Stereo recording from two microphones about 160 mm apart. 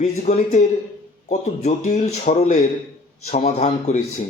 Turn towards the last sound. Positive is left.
turn(degrees=40)  # may be behind; listen again after turning